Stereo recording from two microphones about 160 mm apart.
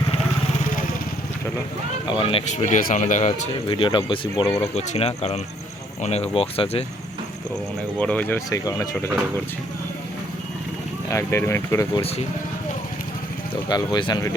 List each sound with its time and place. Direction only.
2.0 s speech: 35° left (ahead or behind)
3.7 s speech: 30° left (ahead or behind)
4.6 s speech: 40° left (ahead or behind)
7.9 s speech: 10° left (ahead or behind)
8.4 s speech: 25° left (ahead or behind)
11.1 s speech: 15° left (ahead or behind)
13.7 s speech: 25° left (ahead or behind)